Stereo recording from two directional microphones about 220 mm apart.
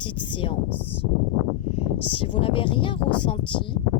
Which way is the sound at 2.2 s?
25° left (ahead or behind).